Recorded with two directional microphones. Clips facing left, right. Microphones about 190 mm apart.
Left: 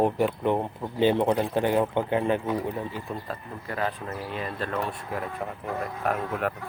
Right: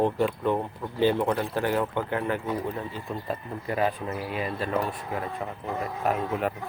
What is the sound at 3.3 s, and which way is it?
Speech, 15° right (ahead or behind).